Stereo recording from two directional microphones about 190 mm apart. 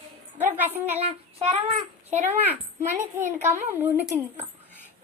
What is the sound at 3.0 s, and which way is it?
A woman's voice, 10° right (ahead or behind).